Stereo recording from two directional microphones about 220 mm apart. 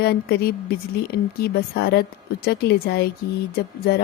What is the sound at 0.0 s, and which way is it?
Speech, 45° left (ahead or behind).